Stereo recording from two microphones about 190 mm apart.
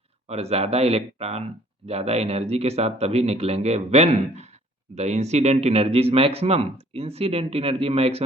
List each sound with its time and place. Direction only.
0.3 s speech: 35° right (ahead or behind)